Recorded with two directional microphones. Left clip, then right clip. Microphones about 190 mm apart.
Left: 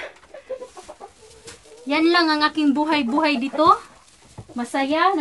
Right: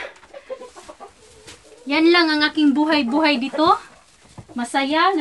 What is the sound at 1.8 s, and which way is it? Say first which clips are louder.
A woman's voice: right 2 dB; 25° left (ahead or behind).